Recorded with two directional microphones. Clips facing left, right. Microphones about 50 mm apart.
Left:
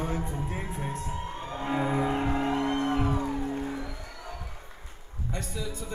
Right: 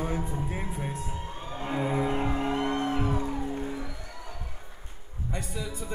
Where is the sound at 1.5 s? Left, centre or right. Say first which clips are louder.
Left 1 dB; left.